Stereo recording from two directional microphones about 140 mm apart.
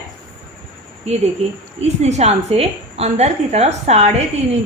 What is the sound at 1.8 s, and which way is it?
A woman's voice, 50° right (ahead or behind).